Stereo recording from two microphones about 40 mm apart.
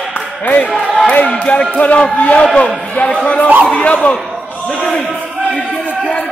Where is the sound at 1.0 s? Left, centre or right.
Left.